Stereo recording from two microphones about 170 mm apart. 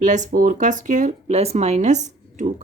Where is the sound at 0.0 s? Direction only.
45° right (ahead or behind).